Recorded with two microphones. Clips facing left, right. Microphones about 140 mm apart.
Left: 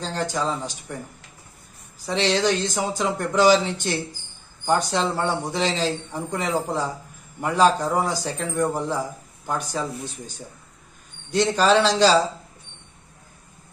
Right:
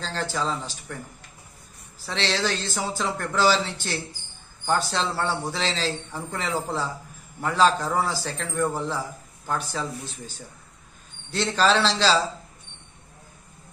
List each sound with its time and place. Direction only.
0.0 s speech: 15° left (ahead or behind)
2.0 s speech: 15° left (ahead or behind)
11.3 s speech: 15° left (ahead or behind)